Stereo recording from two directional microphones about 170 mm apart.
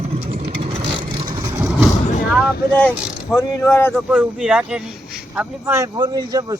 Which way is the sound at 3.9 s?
5° right (ahead or behind).